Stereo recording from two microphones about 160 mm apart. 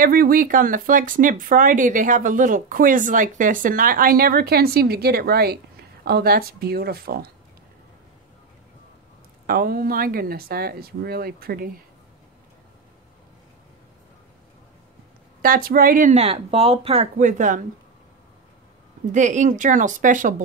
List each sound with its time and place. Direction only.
0.0 s speech: 65° right (ahead or behind)
9.5 s speech: 70° right (ahead or behind)
15.4 s speech: 65° right (ahead or behind)
19.1 s speech: 50° right (ahead or behind)